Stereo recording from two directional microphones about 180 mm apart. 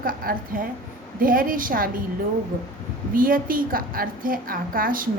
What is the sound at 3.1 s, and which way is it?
A woman's voice, 50° right (ahead or behind).